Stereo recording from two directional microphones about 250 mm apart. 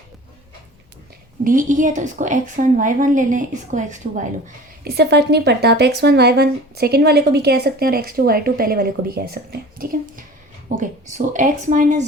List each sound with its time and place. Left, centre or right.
1.5 s speech: right